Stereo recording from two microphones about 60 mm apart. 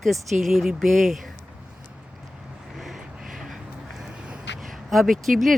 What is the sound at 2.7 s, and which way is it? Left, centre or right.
Vehicle, centre.